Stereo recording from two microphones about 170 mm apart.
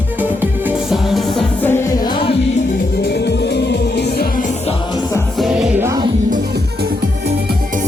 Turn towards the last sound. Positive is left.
turn(degrees=-20)  # may be behind; listen again after turning